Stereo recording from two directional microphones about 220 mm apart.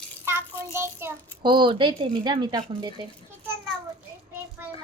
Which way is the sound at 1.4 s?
20° right (ahead or behind).